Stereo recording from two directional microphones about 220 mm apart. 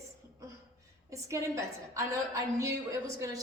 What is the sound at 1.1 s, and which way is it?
A woman's voice, 15° right (ahead or behind).